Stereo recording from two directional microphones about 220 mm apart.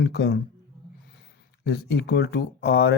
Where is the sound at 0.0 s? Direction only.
50° left (ahead or behind).